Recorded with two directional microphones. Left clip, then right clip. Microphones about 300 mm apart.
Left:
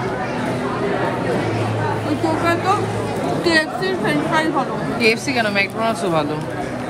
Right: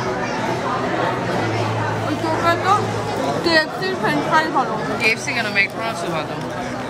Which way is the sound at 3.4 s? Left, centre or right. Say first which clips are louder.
Left 1 dB; centre.